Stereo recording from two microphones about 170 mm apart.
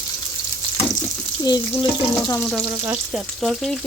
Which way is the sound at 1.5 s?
25° left (ahead or behind).